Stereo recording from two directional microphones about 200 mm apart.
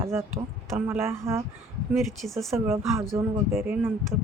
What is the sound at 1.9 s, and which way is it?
Speech, centre (ahead or behind).